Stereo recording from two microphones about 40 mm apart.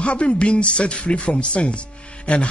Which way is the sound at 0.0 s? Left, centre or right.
Left.